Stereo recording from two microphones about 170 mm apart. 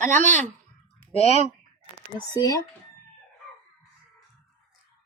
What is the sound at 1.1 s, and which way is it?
Speech, 35° left (ahead or behind).